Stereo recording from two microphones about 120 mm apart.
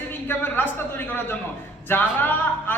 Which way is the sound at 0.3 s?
15° left (ahead or behind).